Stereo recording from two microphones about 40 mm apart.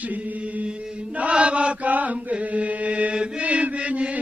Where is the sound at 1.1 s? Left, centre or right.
Right.